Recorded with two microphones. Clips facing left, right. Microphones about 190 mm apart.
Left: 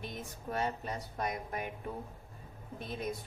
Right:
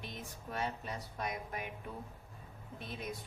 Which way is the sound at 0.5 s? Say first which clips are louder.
Left 4 dB; 45° left (ahead or behind).